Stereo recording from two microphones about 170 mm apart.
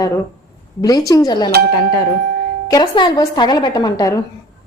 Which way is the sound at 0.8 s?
20° left (ahead or behind).